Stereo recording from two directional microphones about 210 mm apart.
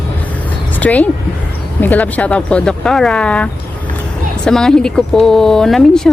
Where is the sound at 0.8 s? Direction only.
5° left (ahead or behind).